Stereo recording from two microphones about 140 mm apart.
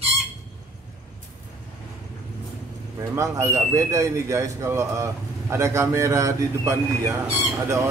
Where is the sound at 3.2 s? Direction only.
20° right (ahead or behind).